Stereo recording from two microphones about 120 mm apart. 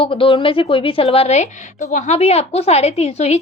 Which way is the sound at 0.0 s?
45° left (ahead or behind).